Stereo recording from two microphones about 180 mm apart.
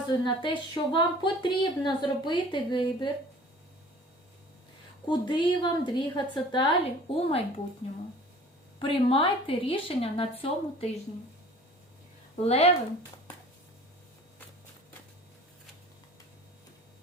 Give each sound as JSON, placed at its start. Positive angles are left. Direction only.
{"t": 0.1, "sound": "speech", "side_deg": 25}
{"t": 5.0, "sound": "a woman's voice", "side_deg": 25}
{"t": 8.8, "sound": "a woman's voice", "side_deg": 30}
{"t": 12.4, "sound": "a woman's voice", "side_deg": 35}